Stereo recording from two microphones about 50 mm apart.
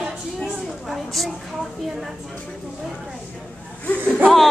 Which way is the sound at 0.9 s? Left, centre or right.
Centre.